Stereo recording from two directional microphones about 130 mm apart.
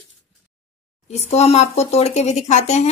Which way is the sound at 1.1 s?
55° left (ahead or behind).